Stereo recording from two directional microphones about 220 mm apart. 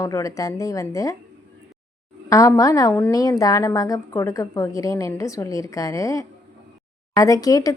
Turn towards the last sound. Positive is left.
turn(degrees=15)  # may be behind; listen again after turning